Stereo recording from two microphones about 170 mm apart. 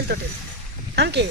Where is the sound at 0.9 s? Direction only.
80° right.